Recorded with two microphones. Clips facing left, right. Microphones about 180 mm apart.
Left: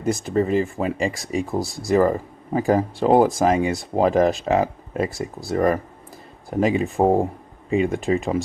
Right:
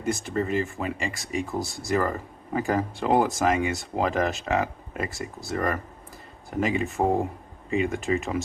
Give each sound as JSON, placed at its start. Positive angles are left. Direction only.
{"t": 0.3, "sound": "speech", "side_deg": 35}